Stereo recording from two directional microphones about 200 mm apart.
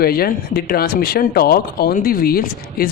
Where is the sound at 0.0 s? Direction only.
50° left (ahead or behind).